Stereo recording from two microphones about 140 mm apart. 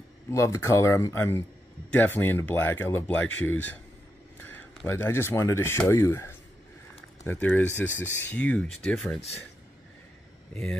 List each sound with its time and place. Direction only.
0.3 s speech: 20° left (ahead or behind)
4.4 s a sound: 15° left (ahead or behind)
4.8 s speech: 15° left (ahead or behind)
10.5 s speech: 5° left (ahead or behind)